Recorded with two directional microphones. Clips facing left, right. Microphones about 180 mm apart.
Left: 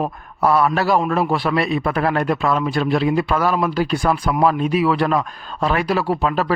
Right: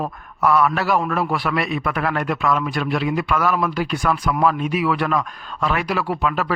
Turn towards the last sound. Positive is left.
turn(degrees=35)  # may be behind; listen again after turning